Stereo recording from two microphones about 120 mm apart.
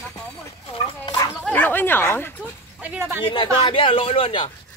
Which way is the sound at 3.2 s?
40° left (ahead or behind).